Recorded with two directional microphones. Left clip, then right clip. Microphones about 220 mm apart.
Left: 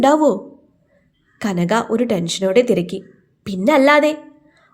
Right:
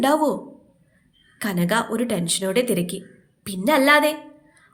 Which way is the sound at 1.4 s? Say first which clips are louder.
Left 4 dB; 30° left (ahead or behind).